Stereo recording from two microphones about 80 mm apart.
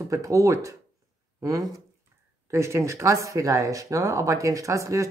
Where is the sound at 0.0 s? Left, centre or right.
Right.